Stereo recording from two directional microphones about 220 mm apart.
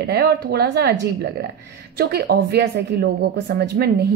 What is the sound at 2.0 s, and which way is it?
A woman's voice, 45° right (ahead or behind).